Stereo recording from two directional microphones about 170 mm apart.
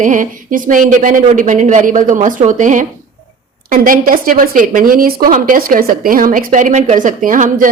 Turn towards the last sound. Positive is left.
turn(degrees=-50)  # may be behind; listen again after turning